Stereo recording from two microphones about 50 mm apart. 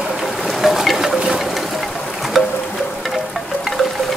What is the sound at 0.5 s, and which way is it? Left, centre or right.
Boat, centre.